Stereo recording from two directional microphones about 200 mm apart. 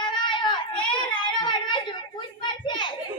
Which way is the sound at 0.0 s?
25° left (ahead or behind).